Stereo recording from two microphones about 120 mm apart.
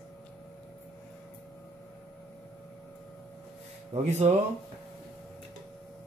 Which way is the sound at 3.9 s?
70° right (ahead or behind).